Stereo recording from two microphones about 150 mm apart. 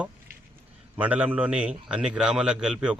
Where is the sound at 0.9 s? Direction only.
10° right (ahead or behind).